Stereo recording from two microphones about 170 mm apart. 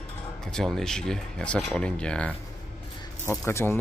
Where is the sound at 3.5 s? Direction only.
15° left (ahead or behind).